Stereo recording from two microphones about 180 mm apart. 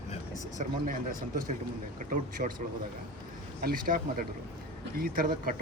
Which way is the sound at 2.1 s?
50° right (ahead or behind).